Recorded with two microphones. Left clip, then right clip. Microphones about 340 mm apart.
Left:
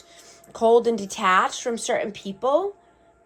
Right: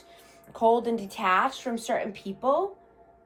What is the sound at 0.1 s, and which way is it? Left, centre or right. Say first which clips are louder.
A woman's voice: left 4 dB; left.